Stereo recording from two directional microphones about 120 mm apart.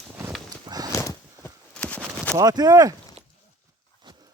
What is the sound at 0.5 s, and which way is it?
Horse, 35° right (ahead or behind).